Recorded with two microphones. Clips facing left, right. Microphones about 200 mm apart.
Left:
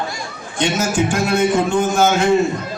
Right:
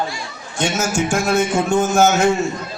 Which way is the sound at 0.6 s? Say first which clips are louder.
Left 2 dB; 45° right (ahead or behind).